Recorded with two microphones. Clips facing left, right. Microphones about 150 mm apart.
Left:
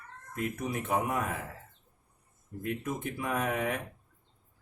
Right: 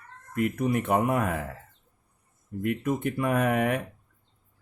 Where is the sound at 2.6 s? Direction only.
65° right (ahead or behind).